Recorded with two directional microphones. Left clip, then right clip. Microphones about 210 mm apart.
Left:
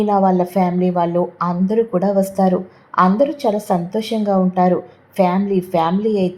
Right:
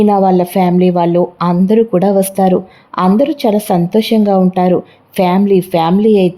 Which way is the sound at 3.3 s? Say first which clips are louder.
Right 5 dB; 35° right (ahead or behind).